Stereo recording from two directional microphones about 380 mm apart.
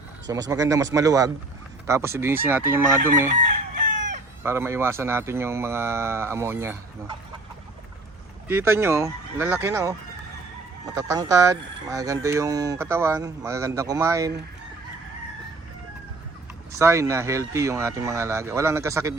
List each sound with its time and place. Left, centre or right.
0.3 s speech: centre
4.4 s speech: centre
8.4 s speech: centre
10.9 s speech: centre
16.7 s speech: centre